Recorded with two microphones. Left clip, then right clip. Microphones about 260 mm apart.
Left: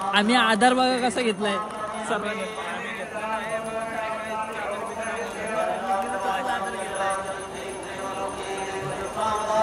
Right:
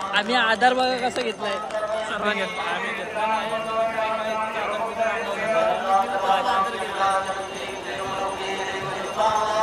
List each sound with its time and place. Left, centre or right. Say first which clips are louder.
0.1 s a man's voice: left 1 dB; centre